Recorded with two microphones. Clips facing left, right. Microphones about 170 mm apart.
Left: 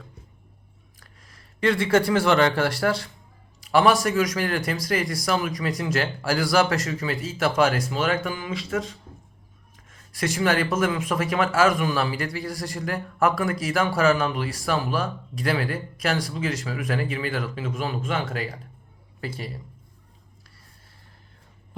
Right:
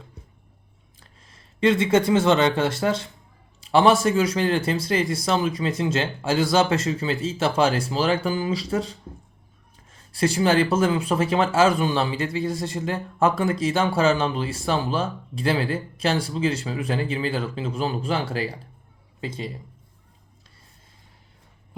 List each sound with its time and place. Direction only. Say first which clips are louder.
0.9 s speech: right 1 dB; 25° right (ahead or behind)
19.2 s speech: right 2 dB; 20° right (ahead or behind)